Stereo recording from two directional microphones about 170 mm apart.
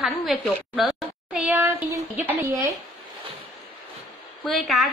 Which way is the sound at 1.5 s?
15° right (ahead or behind).